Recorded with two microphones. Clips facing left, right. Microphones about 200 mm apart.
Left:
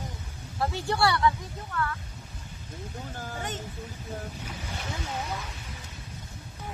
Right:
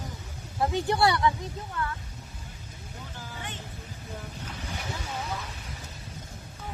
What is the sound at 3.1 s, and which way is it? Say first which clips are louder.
Speech: left 5 dB; 50° left (ahead or behind).